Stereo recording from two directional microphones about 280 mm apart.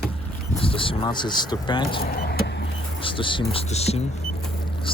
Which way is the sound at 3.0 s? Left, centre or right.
Centre.